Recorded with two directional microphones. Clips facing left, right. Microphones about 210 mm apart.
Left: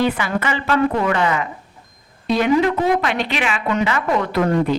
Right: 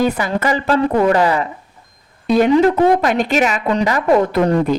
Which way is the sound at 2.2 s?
50° right (ahead or behind).